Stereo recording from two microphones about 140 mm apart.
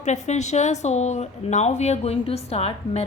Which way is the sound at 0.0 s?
55° left (ahead or behind).